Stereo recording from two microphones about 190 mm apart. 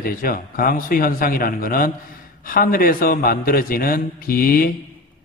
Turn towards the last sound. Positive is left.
turn(degrees=50)  # may be behind; listen again after turning